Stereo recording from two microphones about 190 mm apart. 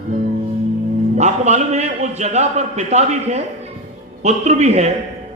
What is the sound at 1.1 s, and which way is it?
A man's voice, 35° right (ahead or behind).